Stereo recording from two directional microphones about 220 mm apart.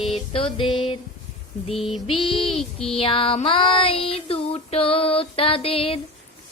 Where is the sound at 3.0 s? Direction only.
25° left (ahead or behind).